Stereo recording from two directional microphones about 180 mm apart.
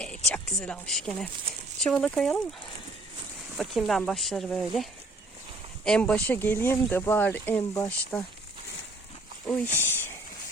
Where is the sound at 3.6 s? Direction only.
Centre (ahead or behind).